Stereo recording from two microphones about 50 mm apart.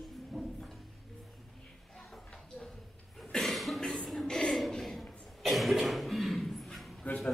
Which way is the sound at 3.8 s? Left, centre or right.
Centre.